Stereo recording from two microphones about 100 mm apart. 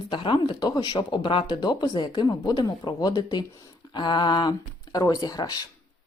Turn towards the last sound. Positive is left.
turn(degrees=40)  # may be behind; listen again after turning